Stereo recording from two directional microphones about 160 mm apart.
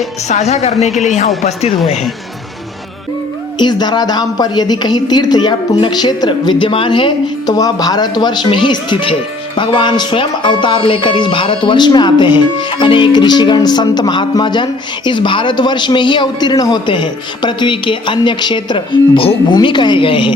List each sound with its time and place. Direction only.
0.3 s speech: 45° left (ahead or behind)
3.6 s speech: 25° left (ahead or behind)